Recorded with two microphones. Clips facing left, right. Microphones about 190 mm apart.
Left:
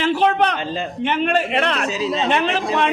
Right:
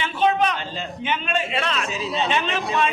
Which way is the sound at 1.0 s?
65° left (ahead or behind).